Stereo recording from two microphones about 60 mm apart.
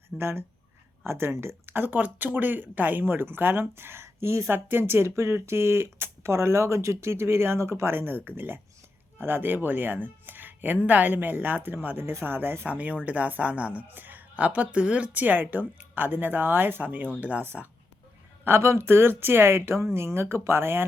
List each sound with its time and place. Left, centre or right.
0.2 s speech: right
12.7 s a woman's voice: right
18.4 s speech: right